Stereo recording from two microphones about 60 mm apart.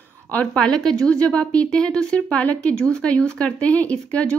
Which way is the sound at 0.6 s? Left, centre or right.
Centre.